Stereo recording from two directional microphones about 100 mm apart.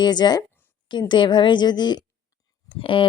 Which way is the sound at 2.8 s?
60° left (ahead or behind).